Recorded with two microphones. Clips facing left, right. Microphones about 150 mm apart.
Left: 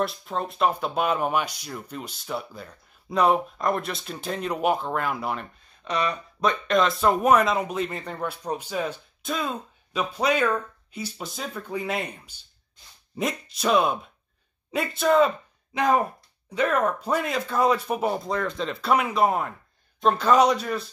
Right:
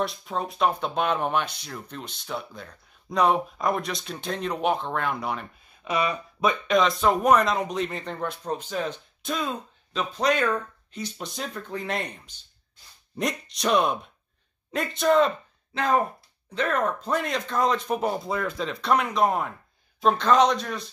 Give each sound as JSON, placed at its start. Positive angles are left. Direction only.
{"t": 0.0, "sound": "speech", "side_deg": 0}
{"t": 5.9, "sound": "speech", "side_deg": -10}
{"t": 15.7, "sound": "speech", "side_deg": 15}